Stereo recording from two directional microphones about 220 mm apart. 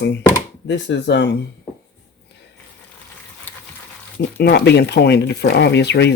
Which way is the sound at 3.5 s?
10° left (ahead or behind).